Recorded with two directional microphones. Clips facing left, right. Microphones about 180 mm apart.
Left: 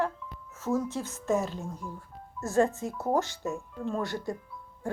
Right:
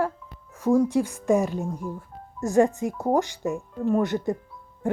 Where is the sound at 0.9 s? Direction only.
15° right (ahead or behind).